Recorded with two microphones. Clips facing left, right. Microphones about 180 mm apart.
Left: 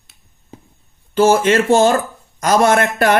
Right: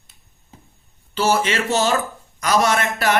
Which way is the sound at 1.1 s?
50° left (ahead or behind).